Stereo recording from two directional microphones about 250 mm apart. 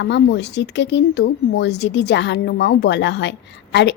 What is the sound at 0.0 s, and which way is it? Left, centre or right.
Speech, left.